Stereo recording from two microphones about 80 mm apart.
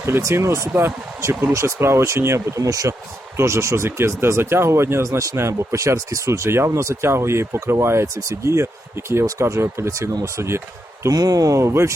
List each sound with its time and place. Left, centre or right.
0.0 s speech: right
11.1 s speech: right